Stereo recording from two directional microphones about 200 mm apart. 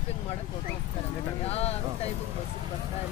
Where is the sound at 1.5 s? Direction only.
30° left (ahead or behind).